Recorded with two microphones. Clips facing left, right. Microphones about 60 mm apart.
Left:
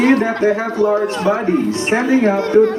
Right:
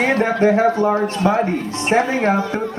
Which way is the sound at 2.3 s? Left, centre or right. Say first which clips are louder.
Left 8 dB; left.